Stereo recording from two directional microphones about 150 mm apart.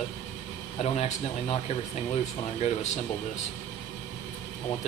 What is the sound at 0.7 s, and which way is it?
Speech, 45° left (ahead or behind).